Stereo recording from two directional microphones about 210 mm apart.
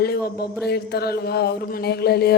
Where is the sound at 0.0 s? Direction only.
50° left (ahead or behind).